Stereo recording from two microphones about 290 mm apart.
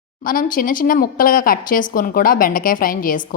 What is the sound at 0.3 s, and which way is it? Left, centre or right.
A woman's voice, left.